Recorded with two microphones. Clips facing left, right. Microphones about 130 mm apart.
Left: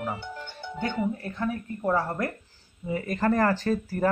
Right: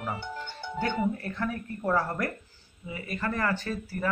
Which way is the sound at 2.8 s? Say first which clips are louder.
Left 8 dB; 40° left (ahead or behind).